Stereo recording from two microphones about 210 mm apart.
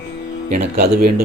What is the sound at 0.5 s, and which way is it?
Speech, 35° right (ahead or behind).